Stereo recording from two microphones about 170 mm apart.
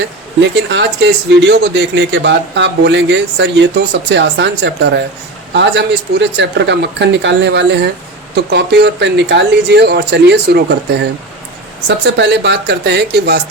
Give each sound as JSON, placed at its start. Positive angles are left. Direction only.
{"t": 0.5, "sound": "speech", "side_deg": -90}
{"t": 8.4, "sound": "speech", "side_deg": -75}
{"t": 11.9, "sound": "speech", "side_deg": -90}